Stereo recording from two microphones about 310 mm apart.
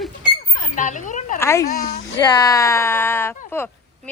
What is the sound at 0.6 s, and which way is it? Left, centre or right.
Speech, left.